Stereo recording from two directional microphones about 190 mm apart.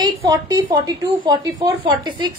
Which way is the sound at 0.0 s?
20° right (ahead or behind).